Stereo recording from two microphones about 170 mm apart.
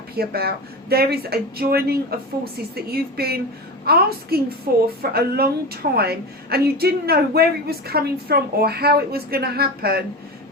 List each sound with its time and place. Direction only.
0.2 s a woman's voice: 65° right (ahead or behind)